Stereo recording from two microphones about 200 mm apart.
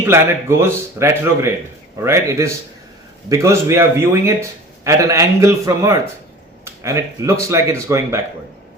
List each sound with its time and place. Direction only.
0.1 s a man's voice: 15° right (ahead or behind)